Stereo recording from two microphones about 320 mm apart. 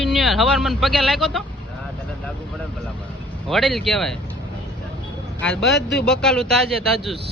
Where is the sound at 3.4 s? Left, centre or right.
Centre.